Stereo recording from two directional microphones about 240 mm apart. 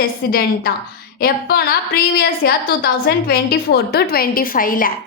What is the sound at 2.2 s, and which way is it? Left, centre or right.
A woman's voice, left.